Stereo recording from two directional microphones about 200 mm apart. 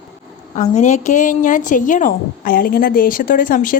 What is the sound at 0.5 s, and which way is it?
A woman's voice, 35° left (ahead or behind).